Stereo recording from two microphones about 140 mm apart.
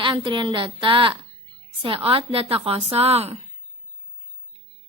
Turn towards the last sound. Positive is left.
turn(degrees=-45)  # may be behind; listen again after turning